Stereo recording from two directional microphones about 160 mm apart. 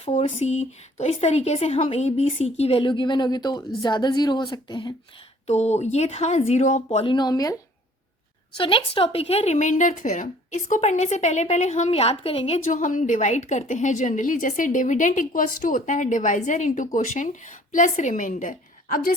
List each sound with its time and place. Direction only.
0.0 s a woman's voice: 45° left (ahead or behind)
5.5 s a woman's voice: 45° left (ahead or behind)
7.0 s a woman's voice: 30° left (ahead or behind)
8.5 s a woman's voice: 35° left (ahead or behind)
12.6 s a woman's voice: 55° left (ahead or behind)